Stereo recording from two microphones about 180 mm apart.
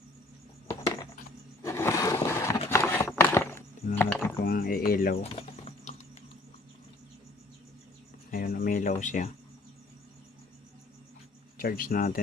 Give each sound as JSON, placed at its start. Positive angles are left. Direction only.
{"t": 1.6, "sound": "roar", "side_deg": 15}
{"t": 2.6, "sound": "a sound", "side_deg": 10}
{"t": 4.4, "sound": "speech", "side_deg": 55}
{"t": 5.2, "sound": "bird", "side_deg": 35}
{"t": 8.3, "sound": "a sound", "side_deg": 50}
{"t": 11.5, "sound": "speech", "side_deg": 50}